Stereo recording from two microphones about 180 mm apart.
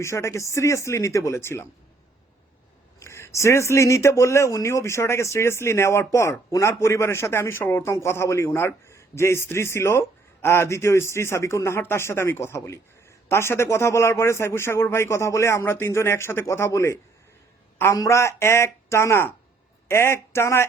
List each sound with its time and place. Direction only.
0.0 s speech: 15° left (ahead or behind)
3.0 s speech: 15° left (ahead or behind)